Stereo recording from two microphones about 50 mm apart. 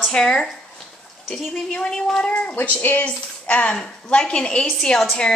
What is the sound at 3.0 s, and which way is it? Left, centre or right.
A woman's voice, left.